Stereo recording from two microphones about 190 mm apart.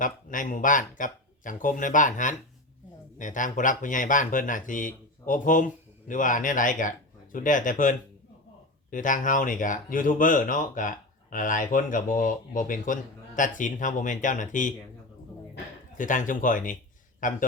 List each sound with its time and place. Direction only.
0.0 s speech: 45° left (ahead or behind)
16.0 s speech: 45° left (ahead or behind)